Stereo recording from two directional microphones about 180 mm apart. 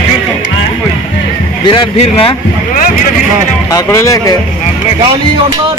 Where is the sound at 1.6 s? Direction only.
25° left (ahead or behind).